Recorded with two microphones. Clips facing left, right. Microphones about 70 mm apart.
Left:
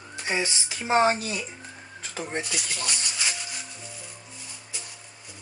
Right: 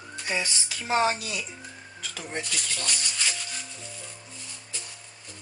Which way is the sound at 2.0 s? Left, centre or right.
Left.